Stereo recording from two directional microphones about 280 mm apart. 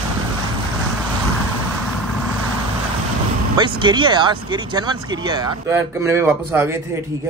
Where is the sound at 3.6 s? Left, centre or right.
Centre.